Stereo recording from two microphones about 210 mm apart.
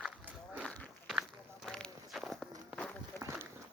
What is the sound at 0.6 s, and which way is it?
Walk, 5° left (ahead or behind).